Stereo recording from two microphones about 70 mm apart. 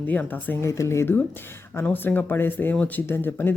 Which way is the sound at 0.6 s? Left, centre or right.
Left.